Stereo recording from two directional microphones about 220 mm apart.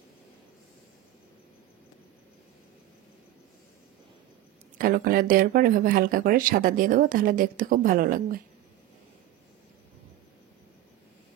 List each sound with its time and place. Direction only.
4.7 s speech: 40° right (ahead or behind)